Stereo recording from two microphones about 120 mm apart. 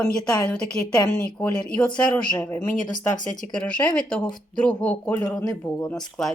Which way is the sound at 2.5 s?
30° left (ahead or behind).